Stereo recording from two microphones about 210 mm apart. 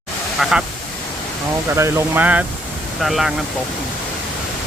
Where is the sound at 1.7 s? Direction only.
10° right (ahead or behind).